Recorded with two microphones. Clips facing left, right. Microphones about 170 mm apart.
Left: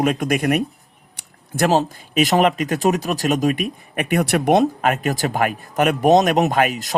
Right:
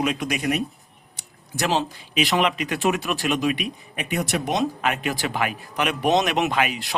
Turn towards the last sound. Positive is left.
turn(degrees=45)  # may be behind; listen again after turning